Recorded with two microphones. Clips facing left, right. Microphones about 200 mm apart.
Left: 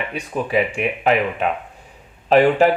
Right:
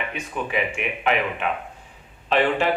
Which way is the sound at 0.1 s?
35° left (ahead or behind).